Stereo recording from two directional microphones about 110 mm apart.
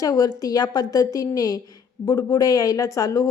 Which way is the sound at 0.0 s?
35° left (ahead or behind).